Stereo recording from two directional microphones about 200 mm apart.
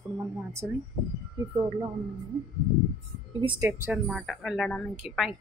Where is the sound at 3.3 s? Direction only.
25° right (ahead or behind).